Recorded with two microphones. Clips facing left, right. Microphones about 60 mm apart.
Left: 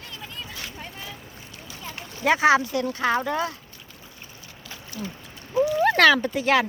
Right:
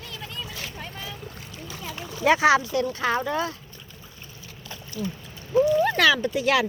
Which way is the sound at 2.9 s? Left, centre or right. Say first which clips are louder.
Left 5 dB; left.